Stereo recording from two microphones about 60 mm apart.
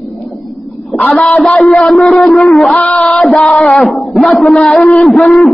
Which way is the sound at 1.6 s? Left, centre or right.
Centre.